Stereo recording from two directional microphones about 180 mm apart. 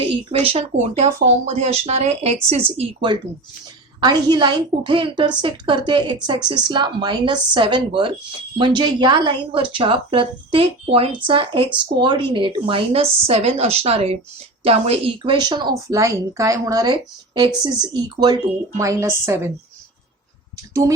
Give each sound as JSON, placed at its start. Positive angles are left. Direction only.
{"t": 0.3, "sound": "a woman's voice", "side_deg": -35}